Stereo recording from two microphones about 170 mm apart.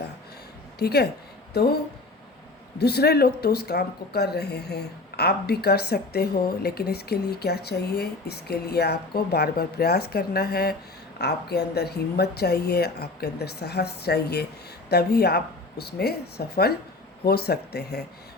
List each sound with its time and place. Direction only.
0.8 s speech: 70° left (ahead or behind)
2.7 s speech: 70° left (ahead or behind)
11.2 s speech: 75° left (ahead or behind)